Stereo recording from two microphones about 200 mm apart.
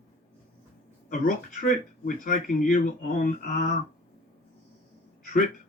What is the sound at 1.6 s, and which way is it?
Speech, 45° left (ahead or behind).